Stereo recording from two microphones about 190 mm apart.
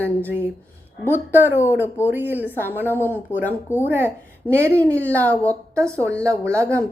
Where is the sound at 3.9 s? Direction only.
10° right (ahead or behind).